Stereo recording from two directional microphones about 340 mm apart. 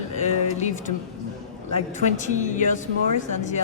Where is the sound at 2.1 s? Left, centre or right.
Left.